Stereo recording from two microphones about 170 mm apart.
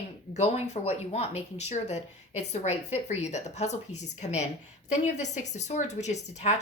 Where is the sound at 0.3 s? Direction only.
40° left (ahead or behind).